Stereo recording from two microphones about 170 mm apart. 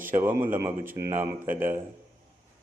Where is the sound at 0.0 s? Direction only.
10° right (ahead or behind).